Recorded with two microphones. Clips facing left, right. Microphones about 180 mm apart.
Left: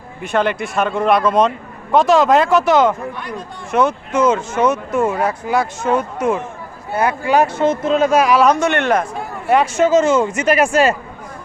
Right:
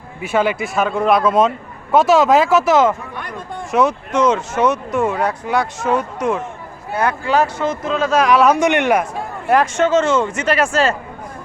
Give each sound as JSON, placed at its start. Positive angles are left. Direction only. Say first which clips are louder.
{"t": 0.2, "sound": "speech", "louder": "even", "side_deg": -5}
{"t": 3.2, "sound": "a man's voice", "louder": "left 1 dB", "side_deg": -50}
{"t": 3.7, "sound": "speech", "louder": "even", "side_deg": 0}
{"t": 7.4, "sound": "speech", "louder": "left 4 dB", "side_deg": 25}
{"t": 8.1, "sound": "speech", "louder": "right 2 dB", "side_deg": 5}
{"t": 8.5, "sound": "speech", "louder": "right 1 dB", "side_deg": -15}
{"t": 9.1, "sound": "speech", "louder": "even", "side_deg": 0}